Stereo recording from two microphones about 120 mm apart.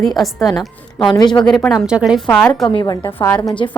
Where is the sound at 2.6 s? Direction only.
35° left (ahead or behind).